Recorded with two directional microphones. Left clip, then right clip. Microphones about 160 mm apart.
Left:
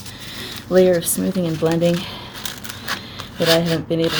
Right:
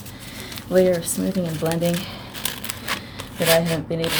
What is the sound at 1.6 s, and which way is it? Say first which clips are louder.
Speech: left 5 dB; 30° left (ahead or behind).